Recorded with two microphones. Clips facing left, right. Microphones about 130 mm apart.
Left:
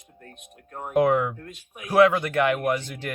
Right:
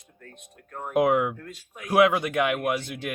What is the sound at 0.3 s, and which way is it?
Speech, 20° left (ahead or behind).